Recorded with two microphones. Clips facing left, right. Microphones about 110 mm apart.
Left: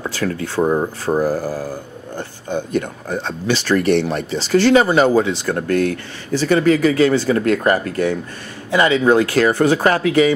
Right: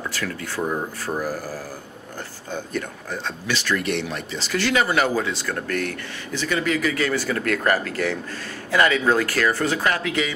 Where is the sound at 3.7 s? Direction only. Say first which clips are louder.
Left 9 dB; 45° left (ahead or behind).